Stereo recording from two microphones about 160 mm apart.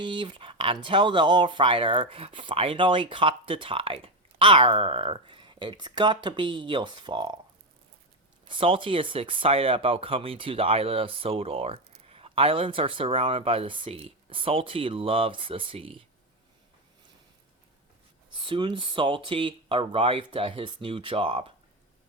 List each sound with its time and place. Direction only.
0.0 s speech: 30° right (ahead or behind)
8.4 s speech: 35° right (ahead or behind)
18.4 s speech: 30° right (ahead or behind)